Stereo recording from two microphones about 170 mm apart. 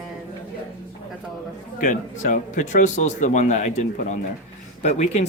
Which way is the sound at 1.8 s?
50° left (ahead or behind).